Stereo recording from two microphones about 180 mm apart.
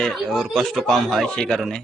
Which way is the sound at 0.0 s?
Centre (ahead or behind).